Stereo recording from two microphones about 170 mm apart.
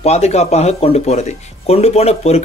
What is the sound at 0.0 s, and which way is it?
Speech, 40° left (ahead or behind).